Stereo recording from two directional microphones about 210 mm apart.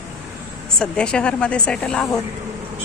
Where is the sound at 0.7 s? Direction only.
5° left (ahead or behind).